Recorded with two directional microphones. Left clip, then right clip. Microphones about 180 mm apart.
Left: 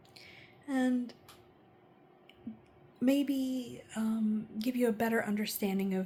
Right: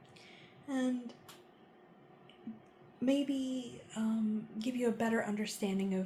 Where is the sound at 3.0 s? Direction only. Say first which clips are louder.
Left 3 dB; 45° left (ahead or behind).